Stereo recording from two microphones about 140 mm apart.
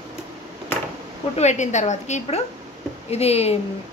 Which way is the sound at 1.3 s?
55° left (ahead or behind).